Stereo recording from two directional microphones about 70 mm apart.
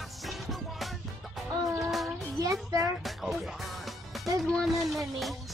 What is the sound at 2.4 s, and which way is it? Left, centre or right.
Child singing, right.